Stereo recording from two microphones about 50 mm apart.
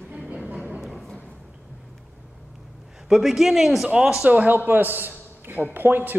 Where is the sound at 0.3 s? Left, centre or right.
Right.